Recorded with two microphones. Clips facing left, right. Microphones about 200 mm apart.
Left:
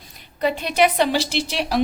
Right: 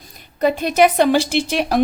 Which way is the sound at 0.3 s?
45° right (ahead or behind).